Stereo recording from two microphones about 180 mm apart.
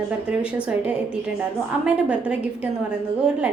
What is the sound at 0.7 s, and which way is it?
A woman's voice, 5° right (ahead or behind).